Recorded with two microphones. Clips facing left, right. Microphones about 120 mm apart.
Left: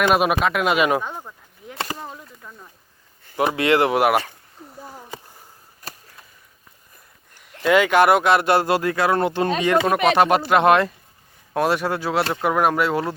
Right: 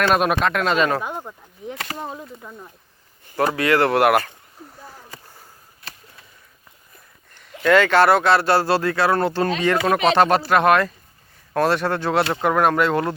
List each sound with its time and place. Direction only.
0.0 s speech: 5° left (ahead or behind)
1.0 s a sound: 15° right (ahead or behind)
2.0 s speech: 20° right (ahead or behind)
3.3 s speech: 20° left (ahead or behind)
7.6 s speech: 10° left (ahead or behind)
11.5 s speech: 10° left (ahead or behind)